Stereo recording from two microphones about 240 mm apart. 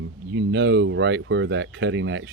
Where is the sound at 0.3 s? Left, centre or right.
Right.